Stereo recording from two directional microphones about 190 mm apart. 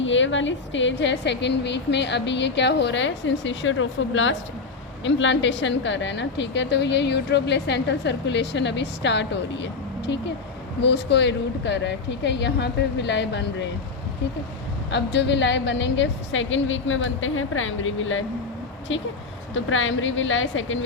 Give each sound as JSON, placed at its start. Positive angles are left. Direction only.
{"t": 0.0, "sound": "a woman's voice", "side_deg": 80}
{"t": 5.0, "sound": "a woman's voice", "side_deg": 80}
{"t": 14.8, "sound": "a woman's voice", "side_deg": 65}
{"t": 19.5, "sound": "a woman's voice", "side_deg": 90}